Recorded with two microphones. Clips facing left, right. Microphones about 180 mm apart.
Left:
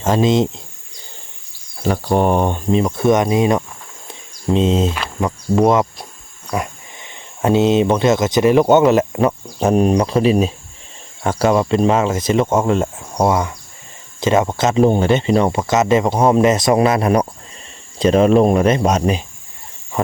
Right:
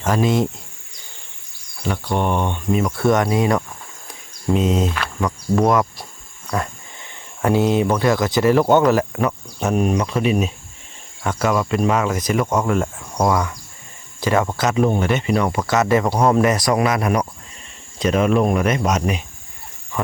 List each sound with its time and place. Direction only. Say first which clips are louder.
0.0 s speech: left 3 dB; 25° left (ahead or behind)
1.8 s speech: left 5 dB; 40° left (ahead or behind)
2.8 s speech: left 2 dB; 20° left (ahead or behind)